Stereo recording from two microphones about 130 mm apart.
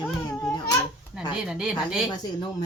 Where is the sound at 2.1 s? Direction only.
30° left (ahead or behind).